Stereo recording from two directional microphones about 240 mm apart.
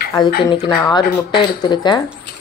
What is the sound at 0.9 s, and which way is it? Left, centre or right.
Speech, centre.